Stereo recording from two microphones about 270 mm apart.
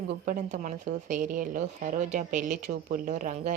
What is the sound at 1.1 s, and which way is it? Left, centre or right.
A woman's voice, right.